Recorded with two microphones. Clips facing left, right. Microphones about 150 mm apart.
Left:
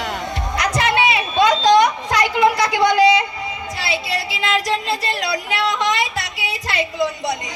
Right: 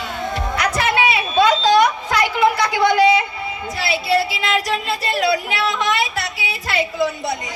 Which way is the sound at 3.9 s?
20° left (ahead or behind).